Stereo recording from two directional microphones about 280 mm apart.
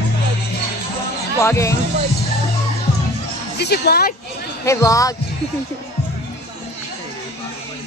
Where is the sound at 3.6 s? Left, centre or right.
Left.